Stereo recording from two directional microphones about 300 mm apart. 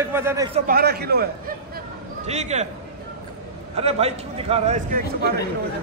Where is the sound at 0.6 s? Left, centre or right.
Right.